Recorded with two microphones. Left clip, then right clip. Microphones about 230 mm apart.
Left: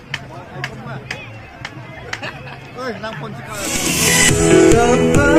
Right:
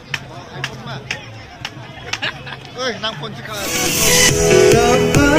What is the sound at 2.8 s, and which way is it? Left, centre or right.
Speech, left.